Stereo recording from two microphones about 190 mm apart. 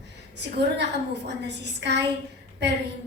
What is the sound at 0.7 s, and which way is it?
A woman's voice, 65° right (ahead or behind).